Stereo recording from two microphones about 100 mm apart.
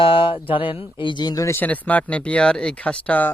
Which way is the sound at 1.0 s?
50° left (ahead or behind).